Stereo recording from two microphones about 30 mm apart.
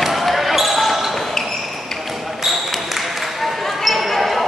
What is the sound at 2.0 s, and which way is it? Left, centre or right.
Basketball bounce, centre.